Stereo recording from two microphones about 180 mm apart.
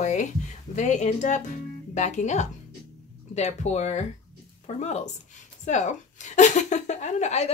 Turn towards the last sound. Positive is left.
turn(degrees=40)  # may be behind; listen again after turning